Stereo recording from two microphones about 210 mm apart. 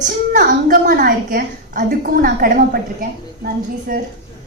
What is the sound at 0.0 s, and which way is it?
A woman's voice, 40° right (ahead or behind).